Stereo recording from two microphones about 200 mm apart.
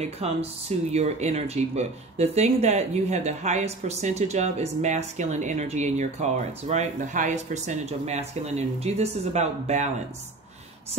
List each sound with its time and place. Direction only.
0.0 s speech: 30° right (ahead or behind)